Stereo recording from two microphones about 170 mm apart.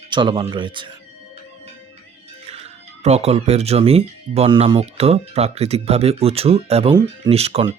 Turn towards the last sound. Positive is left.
turn(degrees=-35)  # may be behind; listen again after turning